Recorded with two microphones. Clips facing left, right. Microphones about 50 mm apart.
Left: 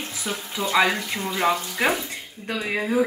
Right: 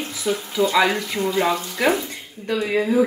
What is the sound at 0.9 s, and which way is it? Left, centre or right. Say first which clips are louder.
Speech: right 4 dB; centre.